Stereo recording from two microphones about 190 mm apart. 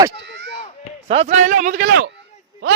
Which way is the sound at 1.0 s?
35° right (ahead or behind).